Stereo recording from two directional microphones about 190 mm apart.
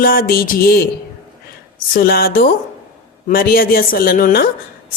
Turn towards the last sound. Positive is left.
turn(degrees=50)  # may be behind; listen again after turning